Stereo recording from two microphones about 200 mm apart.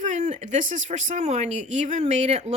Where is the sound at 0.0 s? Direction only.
35° right (ahead or behind).